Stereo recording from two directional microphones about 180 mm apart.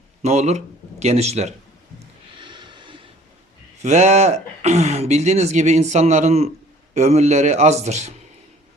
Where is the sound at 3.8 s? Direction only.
40° right (ahead or behind).